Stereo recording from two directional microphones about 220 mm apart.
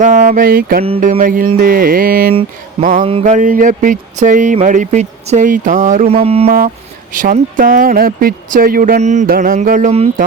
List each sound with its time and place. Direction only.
0.3 s speech: 40° right (ahead or behind)
2.3 s a sound: 25° right (ahead or behind)
2.9 s speech: 30° right (ahead or behind)